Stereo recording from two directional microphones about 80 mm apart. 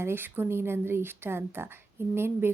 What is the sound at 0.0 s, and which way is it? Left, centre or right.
A woman's voice, right.